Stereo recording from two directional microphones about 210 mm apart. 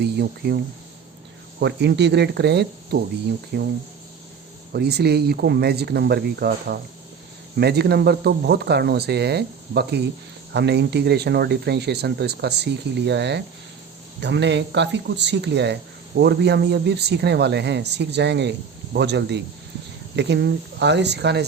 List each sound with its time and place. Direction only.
0.0 s speech: 50° right (ahead or behind)
4.7 s speech: 50° right (ahead or behind)